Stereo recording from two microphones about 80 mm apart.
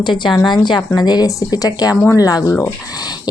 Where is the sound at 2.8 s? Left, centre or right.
Left.